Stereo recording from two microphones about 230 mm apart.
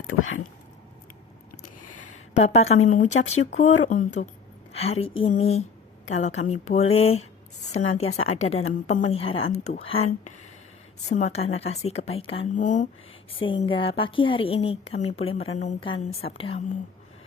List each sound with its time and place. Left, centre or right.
0.1 s speech: left
1.6 s a sound: left
2.3 s a woman's voice: left
8.0 s speech: left
8.4 s a woman's voice: left
11.1 s a woman's voice: left
13.4 s a woman's voice: left